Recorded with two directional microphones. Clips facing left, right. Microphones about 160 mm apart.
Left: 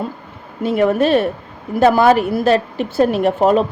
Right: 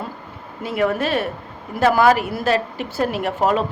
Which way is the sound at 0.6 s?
25° left (ahead or behind).